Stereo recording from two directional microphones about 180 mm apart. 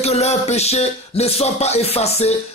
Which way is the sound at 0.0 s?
35° left (ahead or behind).